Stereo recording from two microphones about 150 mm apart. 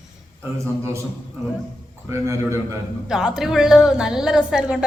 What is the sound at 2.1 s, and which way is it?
Speech, 20° right (ahead or behind).